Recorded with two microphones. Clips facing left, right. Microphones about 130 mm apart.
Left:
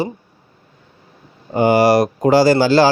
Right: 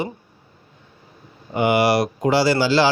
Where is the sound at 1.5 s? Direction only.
40° left (ahead or behind).